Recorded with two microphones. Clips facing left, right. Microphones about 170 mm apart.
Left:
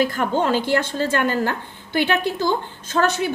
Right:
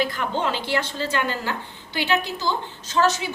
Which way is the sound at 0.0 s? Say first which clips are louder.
Left 4 dB; 45° left (ahead or behind).